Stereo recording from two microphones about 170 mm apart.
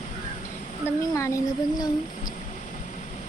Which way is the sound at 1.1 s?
20° left (ahead or behind).